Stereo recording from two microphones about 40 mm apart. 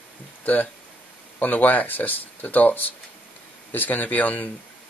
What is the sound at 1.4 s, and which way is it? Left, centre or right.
Speech, left.